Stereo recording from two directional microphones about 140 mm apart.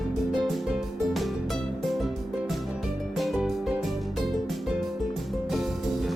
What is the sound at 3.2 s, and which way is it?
Music, centre (ahead or behind).